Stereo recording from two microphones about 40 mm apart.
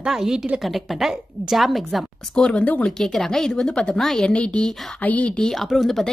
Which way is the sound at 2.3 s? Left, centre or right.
Left.